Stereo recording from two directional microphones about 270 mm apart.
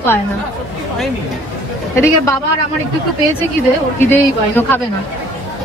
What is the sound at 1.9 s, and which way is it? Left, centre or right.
Speech, centre.